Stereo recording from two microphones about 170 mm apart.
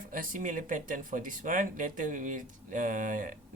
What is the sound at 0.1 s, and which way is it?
Speech, 55° right (ahead or behind).